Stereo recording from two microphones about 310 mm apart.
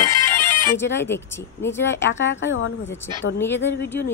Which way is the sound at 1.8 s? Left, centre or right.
Left.